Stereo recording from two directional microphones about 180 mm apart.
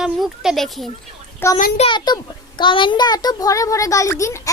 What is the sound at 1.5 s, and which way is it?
A child's voice, 40° left (ahead or behind).